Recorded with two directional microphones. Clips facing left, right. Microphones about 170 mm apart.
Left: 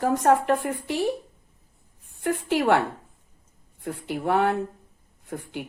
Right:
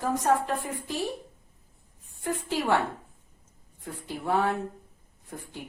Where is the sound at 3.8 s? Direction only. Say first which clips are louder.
Left 5 dB; 70° left (ahead or behind).